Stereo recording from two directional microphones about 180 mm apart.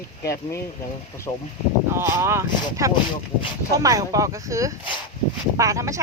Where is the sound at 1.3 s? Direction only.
15° left (ahead or behind).